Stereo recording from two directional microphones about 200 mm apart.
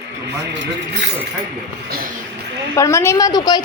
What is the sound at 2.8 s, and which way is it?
Speech, 15° left (ahead or behind).